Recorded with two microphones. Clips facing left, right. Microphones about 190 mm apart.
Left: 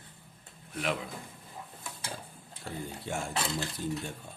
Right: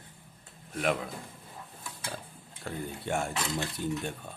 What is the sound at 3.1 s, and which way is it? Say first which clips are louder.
Speech: right 5 dB; 65° right (ahead or behind).